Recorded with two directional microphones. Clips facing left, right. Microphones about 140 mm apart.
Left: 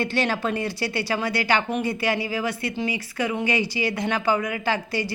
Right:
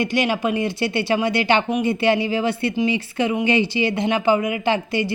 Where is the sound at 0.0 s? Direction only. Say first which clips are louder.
Right 4 dB; 15° right (ahead or behind).